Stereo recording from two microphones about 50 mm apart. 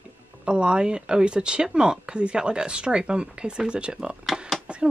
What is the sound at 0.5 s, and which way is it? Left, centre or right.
Speech, centre.